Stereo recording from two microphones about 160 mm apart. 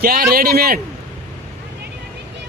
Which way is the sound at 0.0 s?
70° right (ahead or behind).